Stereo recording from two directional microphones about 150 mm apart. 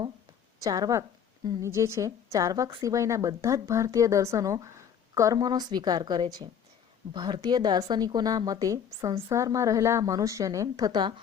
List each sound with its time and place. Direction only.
0.6 s a woman's voice: 25° right (ahead or behind)